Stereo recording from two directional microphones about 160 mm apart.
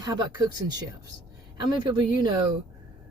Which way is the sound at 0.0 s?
25° right (ahead or behind).